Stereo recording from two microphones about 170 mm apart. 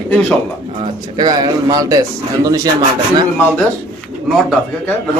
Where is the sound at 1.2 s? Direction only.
25° right (ahead or behind).